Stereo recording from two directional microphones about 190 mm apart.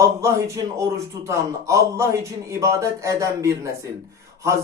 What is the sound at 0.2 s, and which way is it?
Speech, 15° right (ahead or behind).